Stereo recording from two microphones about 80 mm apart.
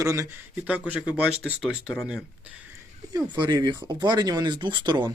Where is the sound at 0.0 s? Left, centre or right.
Right.